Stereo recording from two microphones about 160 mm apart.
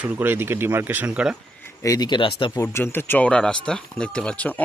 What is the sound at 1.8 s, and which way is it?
Speech, 25° left (ahead or behind).